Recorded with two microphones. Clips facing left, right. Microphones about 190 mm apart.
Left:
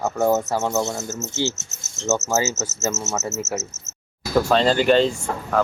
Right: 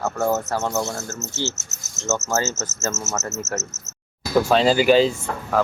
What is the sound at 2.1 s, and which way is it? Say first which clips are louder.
Speech: left 2 dB; 20° left (ahead or behind).